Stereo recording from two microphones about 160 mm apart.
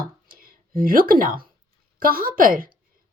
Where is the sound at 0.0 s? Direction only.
65° right (ahead or behind).